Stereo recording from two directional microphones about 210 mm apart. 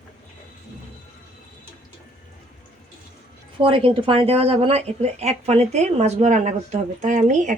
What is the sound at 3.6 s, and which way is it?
Speech, 25° right (ahead or behind).